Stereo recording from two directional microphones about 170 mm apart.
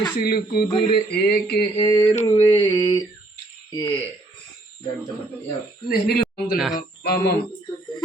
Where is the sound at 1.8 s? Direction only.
20° left (ahead or behind).